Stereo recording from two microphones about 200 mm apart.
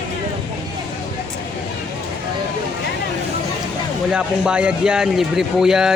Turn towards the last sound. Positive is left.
turn(degrees=-5)  # may be behind; listen again after turning